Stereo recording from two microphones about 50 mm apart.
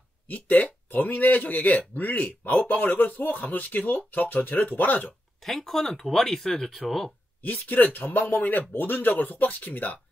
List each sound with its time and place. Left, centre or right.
0.3 s speech: left
5.4 s speech: centre
7.4 s speech: left